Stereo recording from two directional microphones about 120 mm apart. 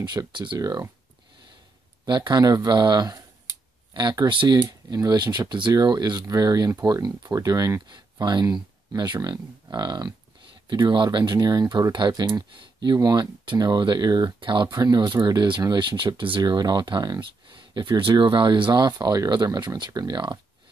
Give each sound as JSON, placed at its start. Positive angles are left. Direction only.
{"t": 0.0, "sound": "speech", "side_deg": -35}
{"t": 2.0, "sound": "speech", "side_deg": -40}